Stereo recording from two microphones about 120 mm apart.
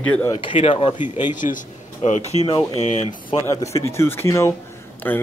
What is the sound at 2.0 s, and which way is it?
Speech, 80° left.